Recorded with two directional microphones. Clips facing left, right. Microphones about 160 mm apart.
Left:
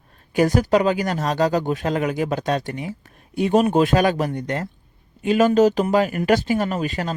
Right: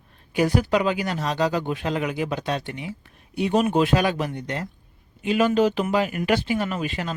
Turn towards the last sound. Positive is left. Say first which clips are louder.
# left 3 dB
turn(degrees=40)  # may be behind; listen again after turning